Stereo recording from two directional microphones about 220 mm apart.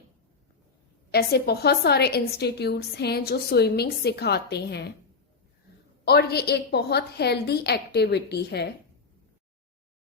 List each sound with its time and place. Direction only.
1.1 s a woman's voice: 45° left (ahead or behind)
6.1 s a woman's voice: 45° left (ahead or behind)